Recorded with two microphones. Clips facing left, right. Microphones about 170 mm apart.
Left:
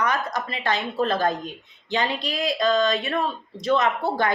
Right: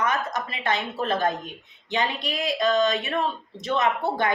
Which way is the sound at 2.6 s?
20° right (ahead or behind).